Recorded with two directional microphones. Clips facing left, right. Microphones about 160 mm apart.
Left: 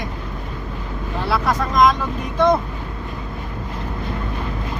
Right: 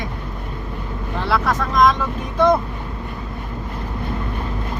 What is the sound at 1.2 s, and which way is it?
Speech, centre (ahead or behind).